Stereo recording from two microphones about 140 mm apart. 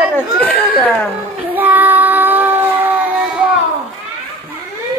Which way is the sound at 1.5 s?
10° right (ahead or behind).